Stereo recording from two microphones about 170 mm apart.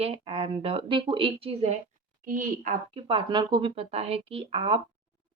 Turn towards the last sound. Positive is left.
turn(degrees=-35)  # may be behind; listen again after turning